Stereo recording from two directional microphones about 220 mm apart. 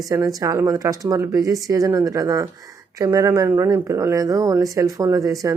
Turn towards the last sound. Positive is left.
turn(degrees=-15)  # may be behind; listen again after turning